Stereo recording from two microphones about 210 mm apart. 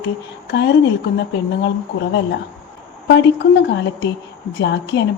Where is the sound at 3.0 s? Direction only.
55° left (ahead or behind).